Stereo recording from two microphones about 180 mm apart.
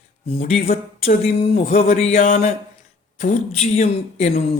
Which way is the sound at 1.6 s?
50° left (ahead or behind).